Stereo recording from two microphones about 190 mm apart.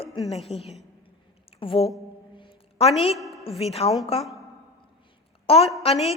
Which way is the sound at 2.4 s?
30° left (ahead or behind).